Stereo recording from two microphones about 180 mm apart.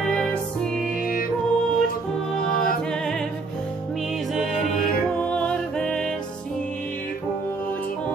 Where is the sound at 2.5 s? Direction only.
50° left (ahead or behind).